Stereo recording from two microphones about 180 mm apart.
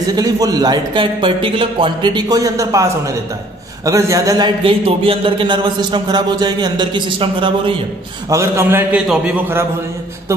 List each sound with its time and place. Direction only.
0.1 s a man's voice: 20° right (ahead or behind)
8.3 s a man's voice: 15° right (ahead or behind)